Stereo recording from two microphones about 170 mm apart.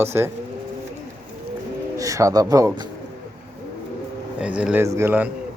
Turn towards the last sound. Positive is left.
turn(degrees=-10)  # may be behind; listen again after turning